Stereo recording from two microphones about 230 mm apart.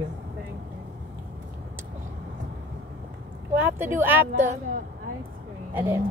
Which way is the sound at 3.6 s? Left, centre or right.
Centre.